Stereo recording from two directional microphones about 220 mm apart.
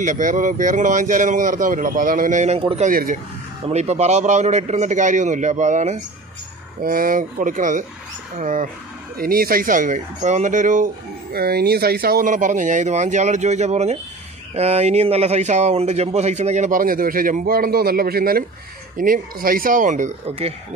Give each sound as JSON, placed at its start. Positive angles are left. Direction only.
{"t": 0.0, "sound": "speech", "side_deg": -35}
{"t": 11.3, "sound": "speech", "side_deg": -45}